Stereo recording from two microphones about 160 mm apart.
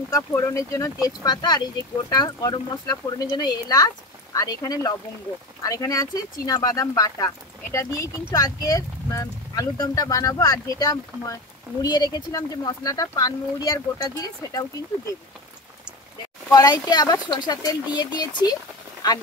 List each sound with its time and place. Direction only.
0.1 s speech: 20° left (ahead or behind)
16.5 s speech: 25° left (ahead or behind)